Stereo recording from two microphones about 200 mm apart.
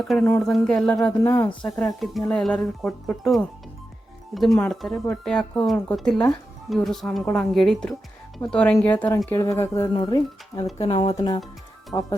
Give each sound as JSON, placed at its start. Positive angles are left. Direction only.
{"t": 0.0, "sound": "speech", "side_deg": 0}
{"t": 1.6, "sound": "speech", "side_deg": 0}
{"t": 4.7, "sound": "speech", "side_deg": 0}